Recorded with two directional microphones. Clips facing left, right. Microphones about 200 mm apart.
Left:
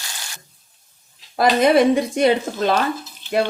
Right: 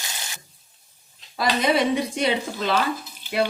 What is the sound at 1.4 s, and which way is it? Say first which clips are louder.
Speech: left 7 dB; 55° left (ahead or behind).